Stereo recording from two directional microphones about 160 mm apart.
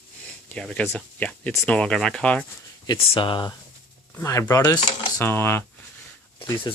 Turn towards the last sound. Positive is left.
turn(degrees=25)  # may be behind; listen again after turning